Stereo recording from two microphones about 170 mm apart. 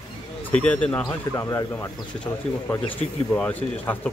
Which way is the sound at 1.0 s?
20° left (ahead or behind).